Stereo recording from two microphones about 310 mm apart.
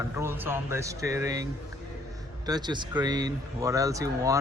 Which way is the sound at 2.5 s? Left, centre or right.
Centre.